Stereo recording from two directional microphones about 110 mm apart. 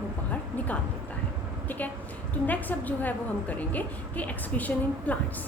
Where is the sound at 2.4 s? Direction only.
15° left (ahead or behind).